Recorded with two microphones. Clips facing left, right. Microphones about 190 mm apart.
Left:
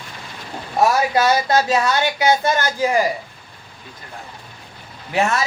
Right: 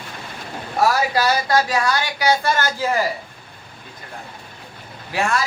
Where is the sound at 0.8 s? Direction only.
20° left (ahead or behind).